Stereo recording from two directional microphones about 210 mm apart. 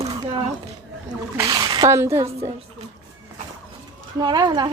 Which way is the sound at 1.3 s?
20° right (ahead or behind).